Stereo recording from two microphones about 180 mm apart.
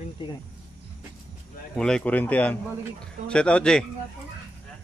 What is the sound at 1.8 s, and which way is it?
Speech, 5° left (ahead or behind).